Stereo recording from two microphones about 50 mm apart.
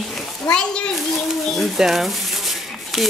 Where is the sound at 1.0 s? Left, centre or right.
Centre.